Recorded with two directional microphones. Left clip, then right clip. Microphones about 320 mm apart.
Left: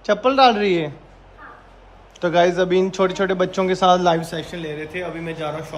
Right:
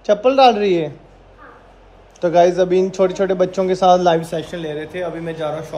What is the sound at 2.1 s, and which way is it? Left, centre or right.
A man's voice, centre.